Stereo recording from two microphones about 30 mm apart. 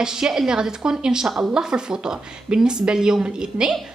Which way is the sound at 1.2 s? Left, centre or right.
Centre.